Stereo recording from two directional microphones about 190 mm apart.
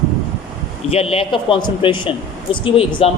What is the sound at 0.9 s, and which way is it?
A man's voice, 30° left (ahead or behind).